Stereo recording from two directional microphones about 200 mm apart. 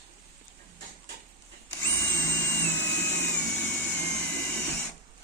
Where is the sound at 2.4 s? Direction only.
10° left (ahead or behind).